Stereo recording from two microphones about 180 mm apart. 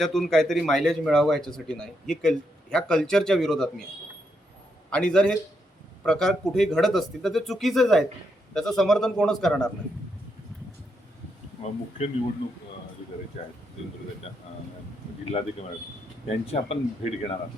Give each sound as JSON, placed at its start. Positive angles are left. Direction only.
{"t": 0.0, "sound": "a man's voice", "side_deg": 0}
{"t": 4.9, "sound": "a man's voice", "side_deg": 5}
{"t": 11.6, "sound": "speech", "side_deg": 35}
{"t": 13.4, "sound": "speech", "side_deg": 35}
{"t": 15.2, "sound": "speech", "side_deg": 35}
{"t": 16.5, "sound": "speech", "side_deg": 35}